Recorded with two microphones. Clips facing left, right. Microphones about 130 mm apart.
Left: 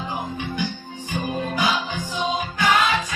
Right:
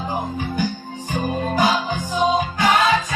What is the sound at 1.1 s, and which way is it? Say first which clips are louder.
Music: right 4 dB; 45° right (ahead or behind).